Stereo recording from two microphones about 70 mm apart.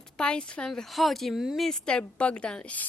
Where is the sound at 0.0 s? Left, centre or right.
Centre.